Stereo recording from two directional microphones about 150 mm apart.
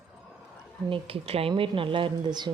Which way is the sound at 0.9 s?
40° right (ahead or behind).